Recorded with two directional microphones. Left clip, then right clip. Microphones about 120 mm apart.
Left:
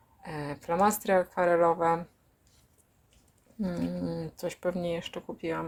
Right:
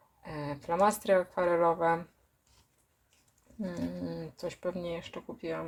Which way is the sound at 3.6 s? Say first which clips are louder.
Left 3 dB; 45° left (ahead or behind).